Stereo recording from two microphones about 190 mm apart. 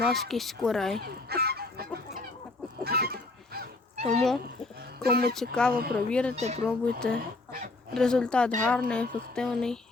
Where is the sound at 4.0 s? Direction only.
35° right (ahead or behind).